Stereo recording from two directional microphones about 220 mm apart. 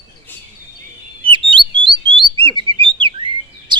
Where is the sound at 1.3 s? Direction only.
20° right (ahead or behind).